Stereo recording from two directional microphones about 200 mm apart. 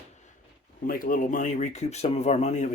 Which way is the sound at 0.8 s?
45° left (ahead or behind).